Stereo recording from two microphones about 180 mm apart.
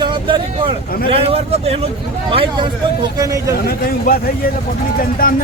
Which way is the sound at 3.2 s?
20° right (ahead or behind).